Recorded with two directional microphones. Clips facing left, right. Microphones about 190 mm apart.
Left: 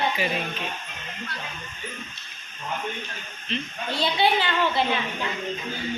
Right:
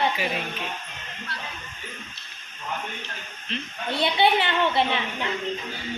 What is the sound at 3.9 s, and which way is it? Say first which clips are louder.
Speech: right 2 dB; 25° right (ahead or behind).